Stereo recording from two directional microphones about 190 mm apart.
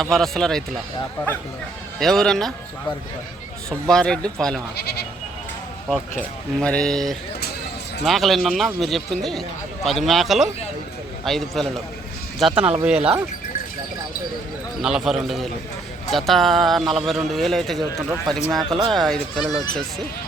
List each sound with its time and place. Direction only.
0.0 s speech: centre (ahead or behind)
2.0 s speech: centre (ahead or behind)
3.7 s speech: 5° left (ahead or behind)
4.8 s speech: 60° left (ahead or behind)
5.9 s speech: 5° left (ahead or behind)
14.8 s speech: centre (ahead or behind)